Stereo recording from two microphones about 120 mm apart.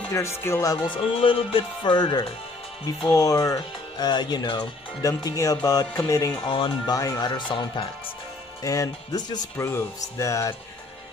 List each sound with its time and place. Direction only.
0.1 s speech: 25° left (ahead or behind)
0.8 s speech: 45° left (ahead or behind); by 6.3 s 25° left (ahead or behind)
6.4 s speech: 40° left (ahead or behind)
7.0 s speech: 30° left (ahead or behind)
8.6 s speech: 30° left (ahead or behind)